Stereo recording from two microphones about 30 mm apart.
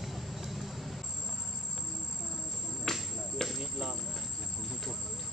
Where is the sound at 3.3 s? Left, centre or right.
Centre.